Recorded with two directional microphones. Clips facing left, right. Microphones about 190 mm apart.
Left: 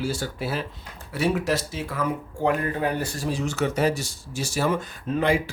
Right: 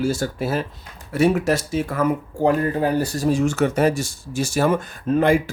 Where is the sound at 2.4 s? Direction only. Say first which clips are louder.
Right 5 dB; 35° right (ahead or behind).